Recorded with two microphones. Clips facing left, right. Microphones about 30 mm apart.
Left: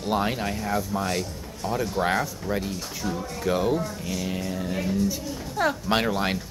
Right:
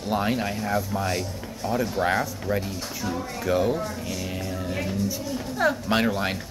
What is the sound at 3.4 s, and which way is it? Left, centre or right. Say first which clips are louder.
Speech: even; centre.